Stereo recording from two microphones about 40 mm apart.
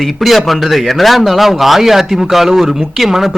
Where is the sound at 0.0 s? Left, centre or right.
Centre.